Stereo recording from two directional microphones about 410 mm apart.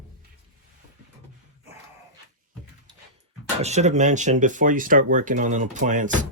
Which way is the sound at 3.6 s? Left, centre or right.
Centre.